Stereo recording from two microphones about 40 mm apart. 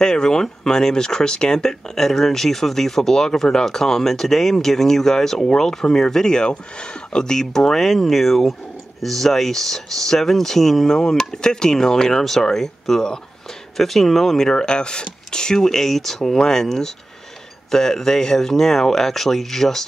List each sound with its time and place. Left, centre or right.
0.0 s speech: centre